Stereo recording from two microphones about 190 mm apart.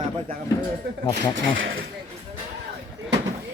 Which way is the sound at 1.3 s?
90° right.